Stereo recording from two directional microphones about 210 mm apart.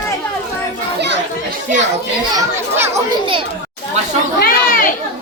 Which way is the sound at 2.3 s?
10° right (ahead or behind).